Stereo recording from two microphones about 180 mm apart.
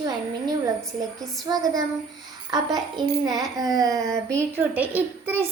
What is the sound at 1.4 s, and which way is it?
Speech, 20° right (ahead or behind).